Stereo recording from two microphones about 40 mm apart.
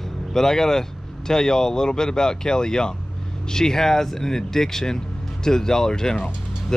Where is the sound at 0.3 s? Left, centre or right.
Centre.